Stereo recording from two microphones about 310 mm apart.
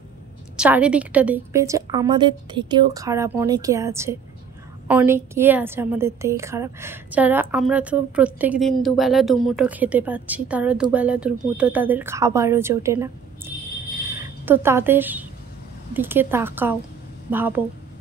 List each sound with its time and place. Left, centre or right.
0.6 s a woman's voice: centre
14.2 s a woman's voice: centre